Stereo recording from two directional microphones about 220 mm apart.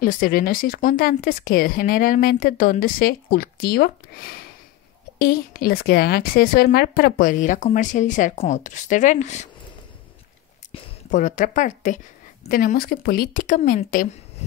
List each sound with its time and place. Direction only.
0.0 s speech: 40° left (ahead or behind)
10.7 s speech: 35° left (ahead or behind)